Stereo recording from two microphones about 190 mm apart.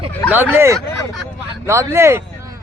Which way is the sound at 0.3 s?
10° right (ahead or behind).